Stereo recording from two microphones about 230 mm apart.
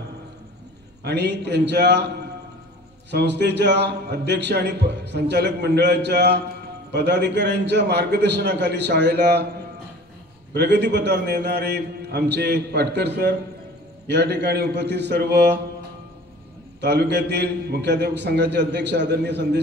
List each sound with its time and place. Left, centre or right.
1.0 s a man's voice: right
3.1 s a man's voice: right
10.5 s a man's voice: right
16.8 s a man's voice: right